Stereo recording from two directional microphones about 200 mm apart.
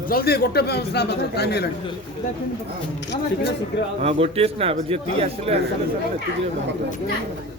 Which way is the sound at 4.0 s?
30° right (ahead or behind).